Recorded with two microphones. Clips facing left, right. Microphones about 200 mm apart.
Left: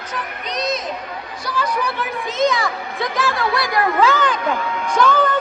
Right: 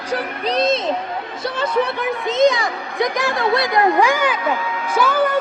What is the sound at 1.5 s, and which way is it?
Children playing, 25° right (ahead or behind).